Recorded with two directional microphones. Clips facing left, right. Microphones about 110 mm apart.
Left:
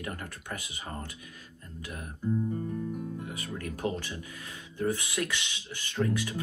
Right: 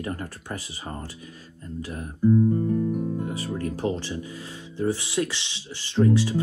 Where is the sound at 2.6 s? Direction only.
50° right (ahead or behind).